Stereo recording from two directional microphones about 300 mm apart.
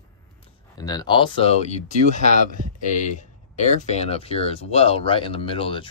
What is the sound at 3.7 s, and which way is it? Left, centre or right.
Speech, left.